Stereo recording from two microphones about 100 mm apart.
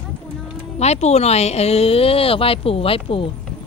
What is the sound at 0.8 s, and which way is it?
Speech, 90° left.